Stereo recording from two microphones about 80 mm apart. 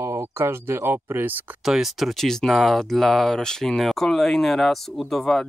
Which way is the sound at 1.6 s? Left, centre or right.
Centre.